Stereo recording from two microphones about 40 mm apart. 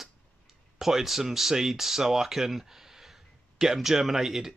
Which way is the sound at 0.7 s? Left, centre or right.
Centre.